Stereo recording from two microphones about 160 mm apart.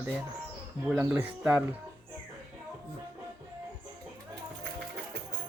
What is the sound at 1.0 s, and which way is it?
Speech, 20° right (ahead or behind).